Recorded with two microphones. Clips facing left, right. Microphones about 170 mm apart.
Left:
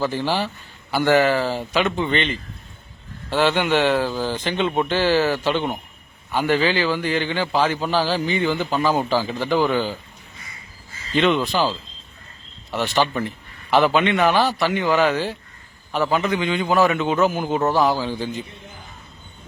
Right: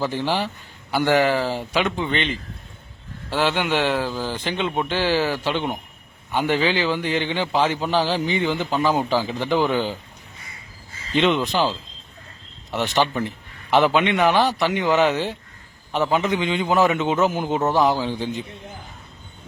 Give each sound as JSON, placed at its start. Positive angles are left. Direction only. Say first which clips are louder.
{"t": 0.3, "sound": "a man's voice", "louder": "left 1 dB", "side_deg": -15}
{"t": 11.1, "sound": "a man's voice", "louder": "left 1 dB", "side_deg": -20}